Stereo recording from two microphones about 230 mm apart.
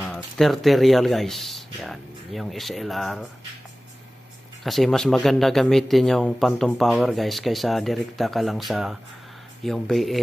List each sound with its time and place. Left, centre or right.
0.0 s speech: centre
4.6 s speech: centre